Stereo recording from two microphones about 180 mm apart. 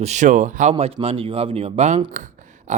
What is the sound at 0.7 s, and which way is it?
A man's voice, 35° right (ahead or behind).